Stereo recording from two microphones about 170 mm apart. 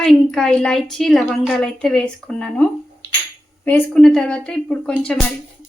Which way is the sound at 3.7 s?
5° left (ahead or behind).